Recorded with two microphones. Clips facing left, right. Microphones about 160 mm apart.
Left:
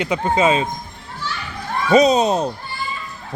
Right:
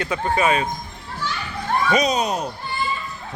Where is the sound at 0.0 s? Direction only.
20° left (ahead or behind).